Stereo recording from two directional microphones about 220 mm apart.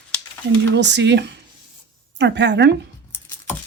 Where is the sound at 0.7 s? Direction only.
50° right (ahead or behind).